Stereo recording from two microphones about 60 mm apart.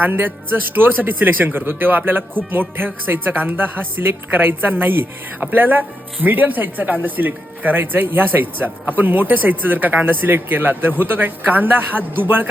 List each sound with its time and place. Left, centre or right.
0.0 s speech: right